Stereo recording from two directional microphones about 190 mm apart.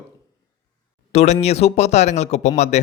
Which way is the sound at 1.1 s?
35° left (ahead or behind).